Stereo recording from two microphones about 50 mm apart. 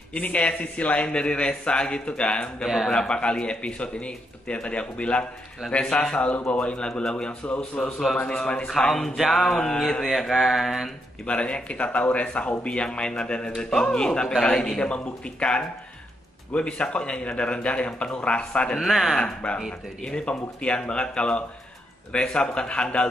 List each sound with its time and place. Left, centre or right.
0.1 s a man's voice: left
2.6 s speech: centre
2.9 s a man's voice: centre
6.6 s speech: centre
7.4 s a man's voice: left
8.4 s a man's voice: centre
8.6 s speech: centre
10.0 s speech: centre
11.2 s a man's voice: left
18.8 s speech: centre
19.1 s a man's voice: left